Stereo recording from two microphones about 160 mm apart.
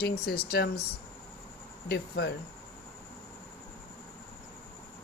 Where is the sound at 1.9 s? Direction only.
90° left.